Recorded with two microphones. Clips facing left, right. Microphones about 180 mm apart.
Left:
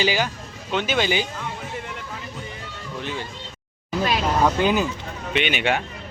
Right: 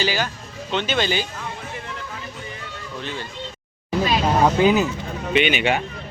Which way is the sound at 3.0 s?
15° left (ahead or behind).